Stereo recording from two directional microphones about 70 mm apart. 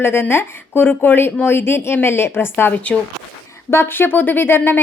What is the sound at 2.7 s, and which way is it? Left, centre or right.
Speech, left.